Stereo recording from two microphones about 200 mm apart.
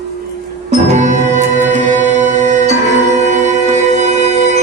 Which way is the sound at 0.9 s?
35° right (ahead or behind).